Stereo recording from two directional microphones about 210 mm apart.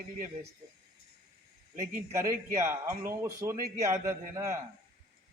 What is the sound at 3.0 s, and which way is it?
A man's voice, 15° right (ahead or behind).